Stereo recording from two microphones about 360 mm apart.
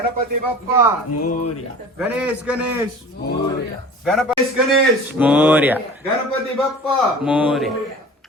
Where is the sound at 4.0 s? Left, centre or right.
Centre.